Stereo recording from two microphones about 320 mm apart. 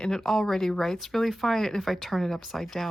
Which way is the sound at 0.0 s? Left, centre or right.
Centre.